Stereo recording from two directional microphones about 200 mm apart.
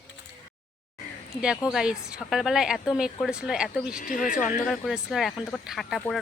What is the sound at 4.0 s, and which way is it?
Speech, 45° left (ahead or behind).